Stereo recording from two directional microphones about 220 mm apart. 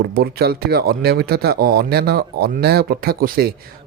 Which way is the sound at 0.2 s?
45° right (ahead or behind).